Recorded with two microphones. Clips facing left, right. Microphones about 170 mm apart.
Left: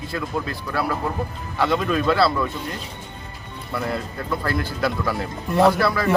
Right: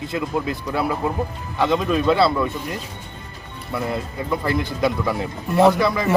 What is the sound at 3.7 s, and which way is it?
Speech, 5° right (ahead or behind).